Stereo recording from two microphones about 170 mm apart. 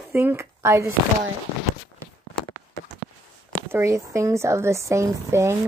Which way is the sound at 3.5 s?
15° right (ahead or behind).